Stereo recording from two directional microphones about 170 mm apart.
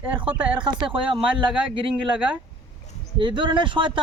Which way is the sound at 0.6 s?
30° right (ahead or behind).